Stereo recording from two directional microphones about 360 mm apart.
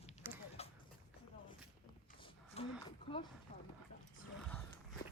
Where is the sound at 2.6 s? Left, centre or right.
Centre.